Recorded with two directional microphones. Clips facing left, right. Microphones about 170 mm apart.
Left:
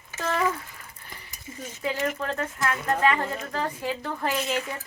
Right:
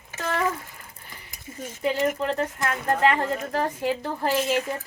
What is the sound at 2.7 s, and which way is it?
Speech, 40° right (ahead or behind).